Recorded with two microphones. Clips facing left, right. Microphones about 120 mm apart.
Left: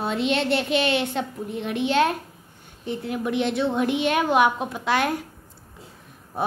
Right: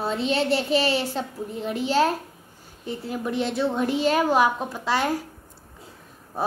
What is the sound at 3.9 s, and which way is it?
Speech, 35° right (ahead or behind).